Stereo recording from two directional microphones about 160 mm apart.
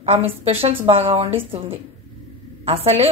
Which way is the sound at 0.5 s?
35° right (ahead or behind).